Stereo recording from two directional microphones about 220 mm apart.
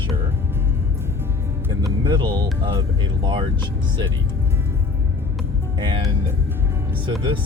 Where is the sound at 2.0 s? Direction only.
20° right (ahead or behind).